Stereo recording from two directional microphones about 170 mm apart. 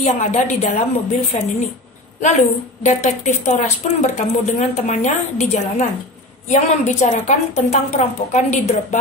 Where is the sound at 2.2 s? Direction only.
45° left (ahead or behind).